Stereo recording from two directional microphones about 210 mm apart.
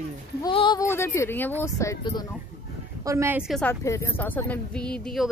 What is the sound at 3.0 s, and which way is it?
A woman's voice, 15° right (ahead or behind).